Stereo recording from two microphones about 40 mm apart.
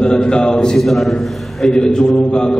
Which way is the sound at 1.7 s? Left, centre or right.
Left.